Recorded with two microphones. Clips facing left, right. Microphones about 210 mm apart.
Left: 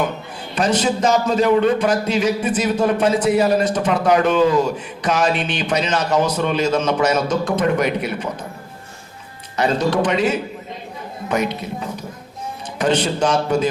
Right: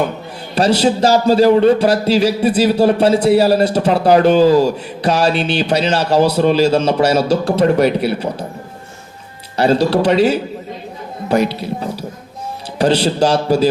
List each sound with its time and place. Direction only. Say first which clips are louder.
0.5 s a man's voice: right 5 dB; 35° right (ahead or behind)
9.6 s a man's voice: right 5 dB; 35° right (ahead or behind)